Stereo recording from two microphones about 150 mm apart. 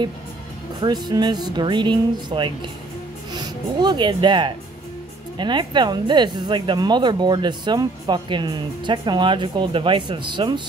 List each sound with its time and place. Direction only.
0.7 s speech: 30° right (ahead or behind)